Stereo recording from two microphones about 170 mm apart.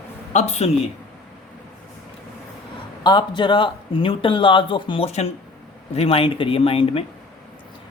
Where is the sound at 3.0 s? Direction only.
25° left (ahead or behind).